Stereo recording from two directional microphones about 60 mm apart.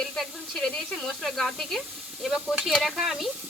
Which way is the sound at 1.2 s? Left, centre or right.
Centre.